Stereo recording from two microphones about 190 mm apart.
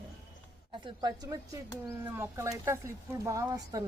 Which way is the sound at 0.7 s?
25° right (ahead or behind).